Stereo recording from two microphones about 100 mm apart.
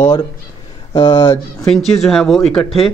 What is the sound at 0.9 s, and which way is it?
Speech, 30° left (ahead or behind).